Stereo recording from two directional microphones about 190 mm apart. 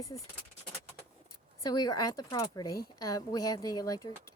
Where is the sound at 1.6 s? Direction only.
20° left (ahead or behind).